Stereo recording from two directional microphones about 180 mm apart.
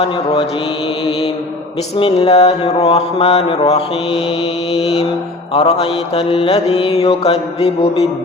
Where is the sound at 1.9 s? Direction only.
30° left (ahead or behind).